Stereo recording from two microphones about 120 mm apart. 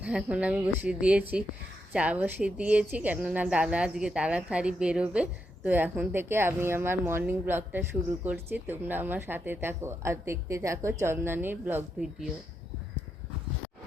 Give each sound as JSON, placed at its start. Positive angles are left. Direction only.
{"t": 0.0, "sound": "speech", "side_deg": -10}